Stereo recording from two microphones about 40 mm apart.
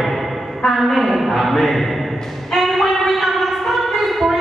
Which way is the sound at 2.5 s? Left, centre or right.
Centre.